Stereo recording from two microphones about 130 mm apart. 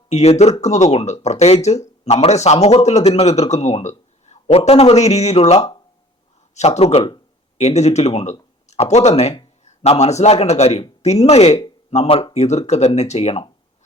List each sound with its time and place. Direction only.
0.1 s a man's voice: 55° left (ahead or behind)